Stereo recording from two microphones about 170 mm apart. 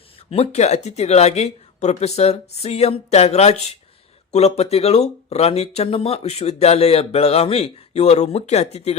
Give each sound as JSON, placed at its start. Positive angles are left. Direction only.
{"t": 0.3, "sound": "speech", "side_deg": 40}